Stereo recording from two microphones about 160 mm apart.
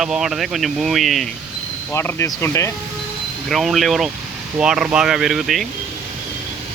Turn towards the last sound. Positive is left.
turn(degrees=0)  # may be behind; listen again after turning